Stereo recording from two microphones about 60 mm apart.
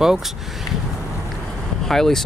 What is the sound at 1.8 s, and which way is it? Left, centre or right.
Speech, centre.